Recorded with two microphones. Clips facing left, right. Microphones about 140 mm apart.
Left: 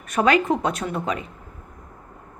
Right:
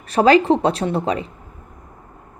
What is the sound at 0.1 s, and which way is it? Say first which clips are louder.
A woman's voice: right 6 dB; 30° right (ahead or behind).